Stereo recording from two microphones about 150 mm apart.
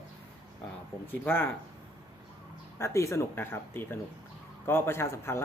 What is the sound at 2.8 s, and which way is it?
Speech, 20° left (ahead or behind).